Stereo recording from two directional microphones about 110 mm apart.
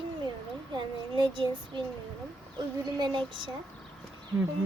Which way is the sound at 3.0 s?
50° right (ahead or behind).